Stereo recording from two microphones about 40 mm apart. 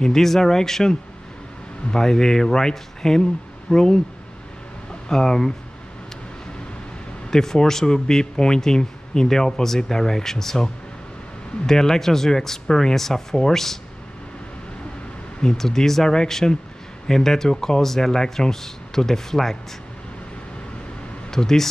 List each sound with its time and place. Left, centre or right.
0.0 s speech: centre
5.0 s speech: centre
7.2 s speech: centre
15.4 s speech: centre
21.3 s speech: centre